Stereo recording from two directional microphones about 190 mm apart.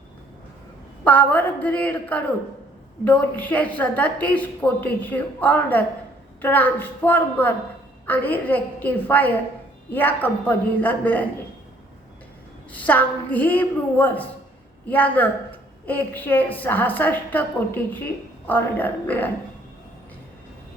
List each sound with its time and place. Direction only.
1.0 s a woman's voice: 10° left (ahead or behind)
12.7 s a woman's voice: 10° left (ahead or behind)